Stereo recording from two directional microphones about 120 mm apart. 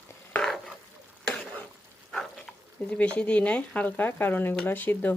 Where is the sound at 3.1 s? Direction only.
10° left (ahead or behind).